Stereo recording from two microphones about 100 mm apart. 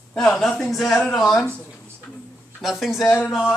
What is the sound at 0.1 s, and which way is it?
A man's voice, 5° left (ahead or behind).